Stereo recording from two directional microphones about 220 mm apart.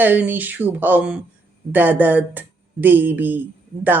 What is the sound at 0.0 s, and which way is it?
Speech, 10° right (ahead or behind).